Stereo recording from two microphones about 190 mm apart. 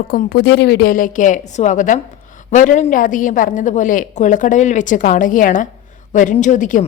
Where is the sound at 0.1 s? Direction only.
50° left (ahead or behind).